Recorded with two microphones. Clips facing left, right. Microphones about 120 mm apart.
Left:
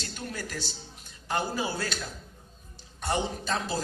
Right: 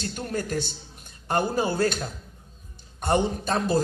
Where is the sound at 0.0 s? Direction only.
45° right (ahead or behind).